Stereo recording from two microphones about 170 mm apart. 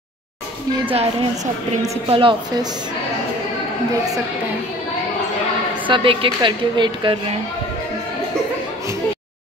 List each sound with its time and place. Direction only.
0.8 s a woman's voice: 40° right (ahead or behind)
5.9 s a woman's voice: 30° right (ahead or behind)